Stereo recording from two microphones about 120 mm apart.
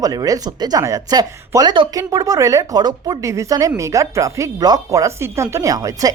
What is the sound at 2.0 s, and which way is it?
A woman's voice, 30° right (ahead or behind).